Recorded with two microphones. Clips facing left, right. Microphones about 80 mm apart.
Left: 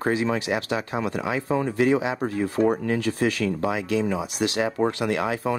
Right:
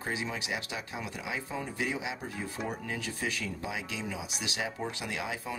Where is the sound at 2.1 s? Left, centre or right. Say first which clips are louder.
Left 14 dB; left.